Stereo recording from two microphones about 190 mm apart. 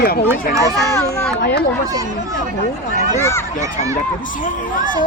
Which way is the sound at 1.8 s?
20° right (ahead or behind).